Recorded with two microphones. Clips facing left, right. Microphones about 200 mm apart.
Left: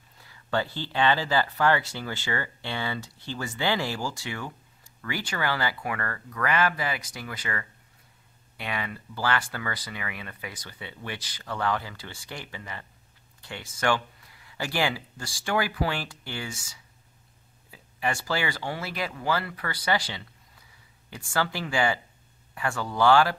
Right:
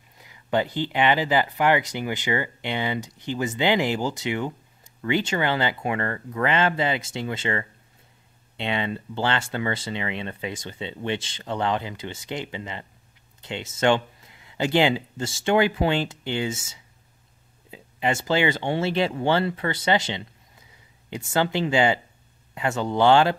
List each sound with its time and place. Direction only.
0.2 s speech: 15° right (ahead or behind)